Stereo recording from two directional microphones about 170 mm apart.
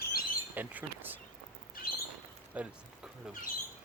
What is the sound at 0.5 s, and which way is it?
Bird, 10° right (ahead or behind).